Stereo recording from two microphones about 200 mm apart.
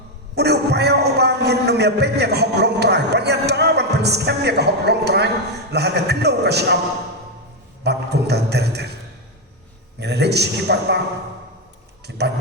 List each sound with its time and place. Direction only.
0.3 s a man's voice: 55° right (ahead or behind)
7.9 s music: 55° right (ahead or behind)
10.0 s a man's voice: 55° right (ahead or behind)
12.0 s speech: 55° right (ahead or behind)